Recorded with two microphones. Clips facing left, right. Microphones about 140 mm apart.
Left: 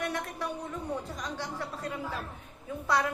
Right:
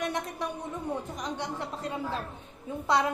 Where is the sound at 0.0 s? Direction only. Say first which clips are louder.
Right 2 dB; 20° right (ahead or behind).